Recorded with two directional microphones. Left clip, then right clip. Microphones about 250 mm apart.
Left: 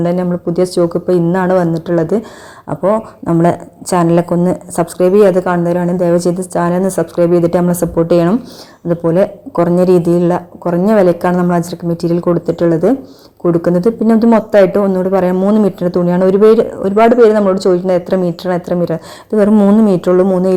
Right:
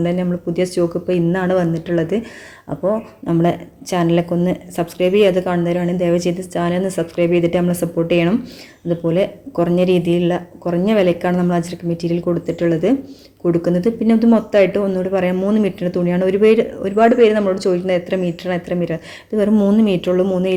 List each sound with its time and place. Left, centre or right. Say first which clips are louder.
0.0 s speech: left 5 dB; centre
0.8 s a woman's voice: left 6 dB; centre